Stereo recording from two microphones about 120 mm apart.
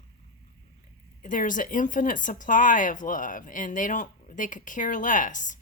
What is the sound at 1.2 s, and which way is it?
Speech, 90° left.